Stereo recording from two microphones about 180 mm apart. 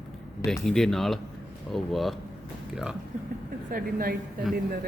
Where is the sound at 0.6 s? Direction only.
5° left (ahead or behind).